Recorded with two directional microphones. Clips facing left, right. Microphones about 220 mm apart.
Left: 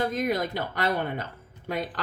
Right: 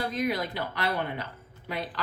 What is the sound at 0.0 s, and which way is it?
Speech, 45° left (ahead or behind).